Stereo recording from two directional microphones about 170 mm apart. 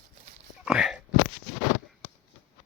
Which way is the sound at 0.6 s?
5° right (ahead or behind).